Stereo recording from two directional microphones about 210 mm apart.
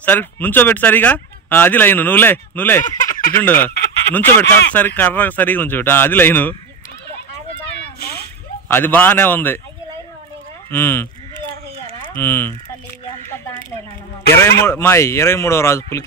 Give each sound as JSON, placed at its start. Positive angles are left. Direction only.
{"t": 0.0, "sound": "speech", "side_deg": 10}
{"t": 3.1, "sound": "a sound", "side_deg": 40}
{"t": 3.3, "sound": "speech", "side_deg": 10}
{"t": 8.6, "sound": "speech", "side_deg": 10}
{"t": 10.7, "sound": "speech", "side_deg": 10}
{"t": 12.2, "sound": "speech", "side_deg": 10}
{"t": 14.3, "sound": "speech", "side_deg": 10}